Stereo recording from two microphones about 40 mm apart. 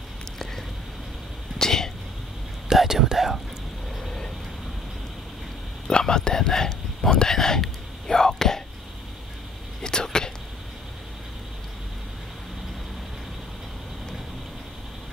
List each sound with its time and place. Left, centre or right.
1.6 s speech: centre
2.7 s whispering: centre
4.0 s vehicle: centre
5.9 s speech: centre
9.8 s a sound: centre